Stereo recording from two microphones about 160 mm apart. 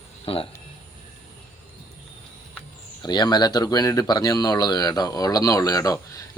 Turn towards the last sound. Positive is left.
turn(degrees=20)  # may be behind; listen again after turning